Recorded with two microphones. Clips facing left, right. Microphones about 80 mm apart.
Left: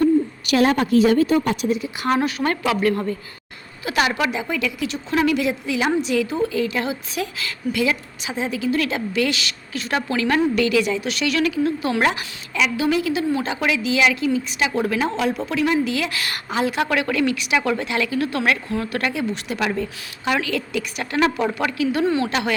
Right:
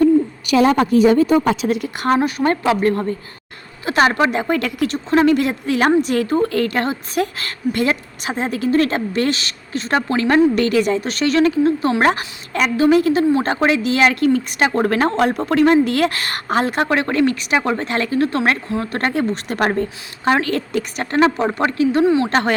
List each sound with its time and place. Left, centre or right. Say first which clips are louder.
1.6 s a woman's voice: right 2 dB; right
2.1 s a woman's voice: right 4 dB; right
5.1 s a woman's voice: right 5 dB; right
21.2 s speech: right 4 dB; right
22.0 s speech: right 4 dB; centre
22.3 s speech: right 5 dB; right